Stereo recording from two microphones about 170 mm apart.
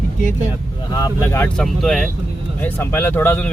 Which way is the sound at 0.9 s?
20° left (ahead or behind).